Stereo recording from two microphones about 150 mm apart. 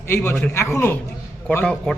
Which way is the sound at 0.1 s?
15° left (ahead or behind).